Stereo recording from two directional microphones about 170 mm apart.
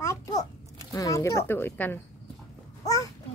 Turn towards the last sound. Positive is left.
turn(degrees=20)  # may be behind; listen again after turning